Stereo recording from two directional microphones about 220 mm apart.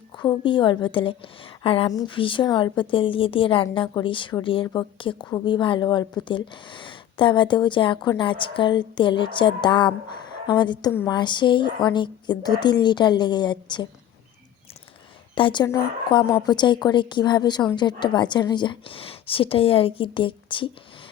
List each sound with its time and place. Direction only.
0.2 s a woman's voice: 20° left (ahead or behind)
15.4 s a woman's voice: 20° left (ahead or behind)